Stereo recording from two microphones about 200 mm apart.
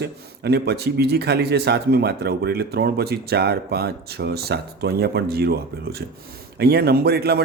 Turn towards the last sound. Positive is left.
turn(degrees=-50)  # may be behind; listen again after turning